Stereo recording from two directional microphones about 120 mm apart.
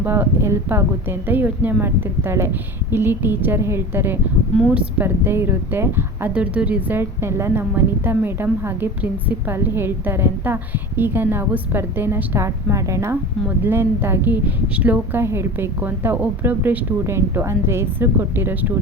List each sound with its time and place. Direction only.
0.0 s speech: 20° right (ahead or behind)